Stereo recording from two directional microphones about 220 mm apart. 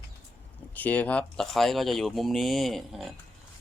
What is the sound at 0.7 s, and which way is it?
Speech, 5° left (ahead or behind).